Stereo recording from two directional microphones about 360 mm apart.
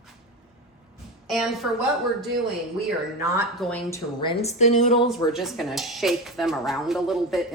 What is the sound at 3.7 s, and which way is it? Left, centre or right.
A woman's voice, centre.